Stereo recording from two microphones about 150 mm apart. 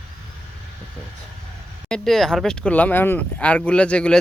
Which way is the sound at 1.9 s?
Centre (ahead or behind).